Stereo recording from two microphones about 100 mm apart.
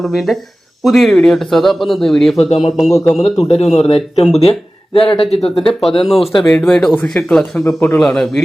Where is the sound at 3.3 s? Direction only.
90° left; by 5.2 s 70° left (ahead or behind).